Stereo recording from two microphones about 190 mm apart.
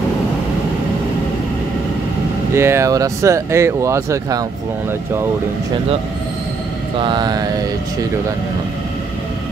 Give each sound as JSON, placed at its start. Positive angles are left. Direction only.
{"t": 2.5, "sound": "speech", "side_deg": -15}
{"t": 7.0, "sound": "mantra", "side_deg": -25}